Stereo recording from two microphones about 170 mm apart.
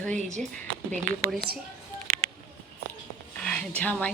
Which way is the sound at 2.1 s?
55° right (ahead or behind).